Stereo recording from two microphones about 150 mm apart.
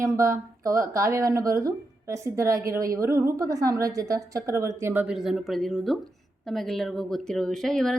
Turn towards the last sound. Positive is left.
turn(degrees=5)  # may be behind; listen again after turning